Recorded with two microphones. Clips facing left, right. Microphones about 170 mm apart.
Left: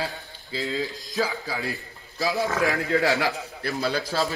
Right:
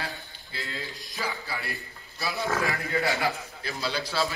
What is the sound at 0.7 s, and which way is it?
A man's voice, 90° left.